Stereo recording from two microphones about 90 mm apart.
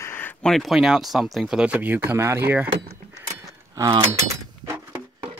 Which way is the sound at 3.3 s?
45° right (ahead or behind).